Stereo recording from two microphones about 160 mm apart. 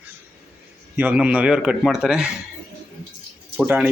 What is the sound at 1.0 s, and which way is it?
Speech, 10° right (ahead or behind).